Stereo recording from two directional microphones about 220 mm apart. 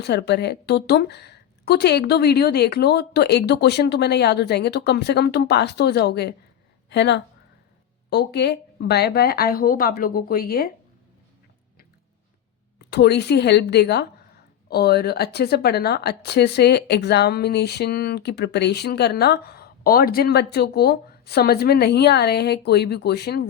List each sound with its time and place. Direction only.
0.0 s speech: 50° left (ahead or behind)
12.9 s speech: 50° left (ahead or behind)